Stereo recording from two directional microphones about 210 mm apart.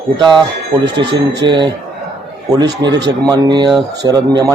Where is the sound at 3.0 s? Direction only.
20° right (ahead or behind).